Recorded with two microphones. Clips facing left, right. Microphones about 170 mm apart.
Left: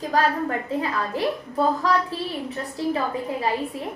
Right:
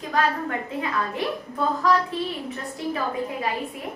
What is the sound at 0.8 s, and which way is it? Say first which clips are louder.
A child's voice: even; 35° left (ahead or behind).